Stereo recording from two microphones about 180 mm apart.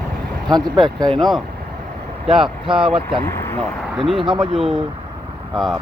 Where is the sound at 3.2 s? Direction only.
15° left (ahead or behind).